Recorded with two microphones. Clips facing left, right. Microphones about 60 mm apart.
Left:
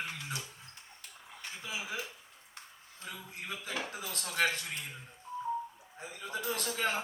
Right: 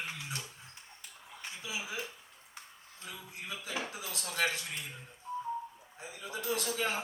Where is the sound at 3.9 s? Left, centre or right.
Left.